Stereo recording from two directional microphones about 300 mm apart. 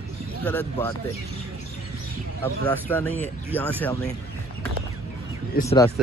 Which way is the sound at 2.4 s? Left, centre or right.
Centre.